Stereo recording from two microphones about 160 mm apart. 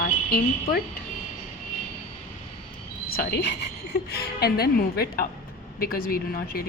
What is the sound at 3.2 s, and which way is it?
A woman's voice, 85° left.